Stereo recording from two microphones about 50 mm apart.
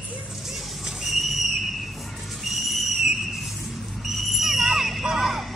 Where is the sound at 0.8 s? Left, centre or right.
Centre.